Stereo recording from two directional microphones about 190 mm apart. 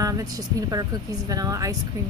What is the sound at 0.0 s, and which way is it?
Speech, 20° right (ahead or behind).